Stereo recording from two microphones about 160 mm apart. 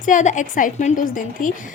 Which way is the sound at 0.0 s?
50° left (ahead or behind).